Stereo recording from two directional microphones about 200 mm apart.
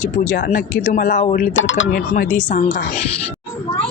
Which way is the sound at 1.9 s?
45° left (ahead or behind).